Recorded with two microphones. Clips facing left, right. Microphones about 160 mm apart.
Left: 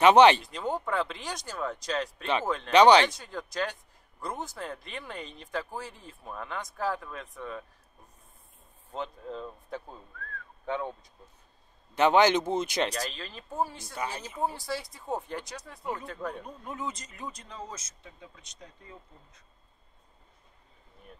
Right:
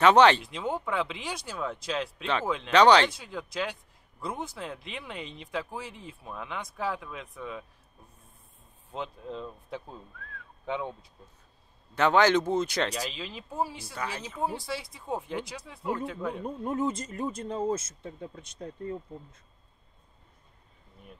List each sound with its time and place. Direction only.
0.0 s speech: 15° left (ahead or behind)
0.4 s speech: centre (ahead or behind)
2.7 s speech: 15° left (ahead or behind)
3.1 s speech: 5° right (ahead or behind)
8.9 s speech: centre (ahead or behind)
11.9 s speech: 20° left (ahead or behind)
12.9 s speech: 5° right (ahead or behind)
16.4 s speech: 50° right (ahead or behind)